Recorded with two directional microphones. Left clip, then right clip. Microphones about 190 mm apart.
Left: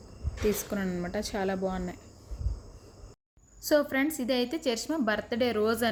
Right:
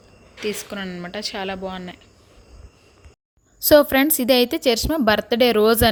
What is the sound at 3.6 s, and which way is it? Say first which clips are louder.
A woman's voice: right 12 dB; 50° right (ahead or behind).